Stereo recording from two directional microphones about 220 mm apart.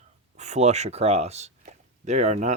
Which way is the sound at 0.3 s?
30° right (ahead or behind).